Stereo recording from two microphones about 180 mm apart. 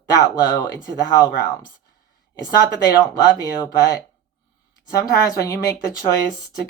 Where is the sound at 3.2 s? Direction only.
20° left (ahead or behind).